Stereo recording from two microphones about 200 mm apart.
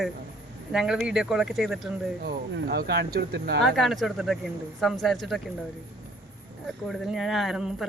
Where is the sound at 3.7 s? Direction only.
Centre (ahead or behind).